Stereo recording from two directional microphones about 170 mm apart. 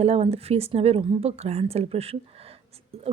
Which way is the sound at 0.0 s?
35° right (ahead or behind).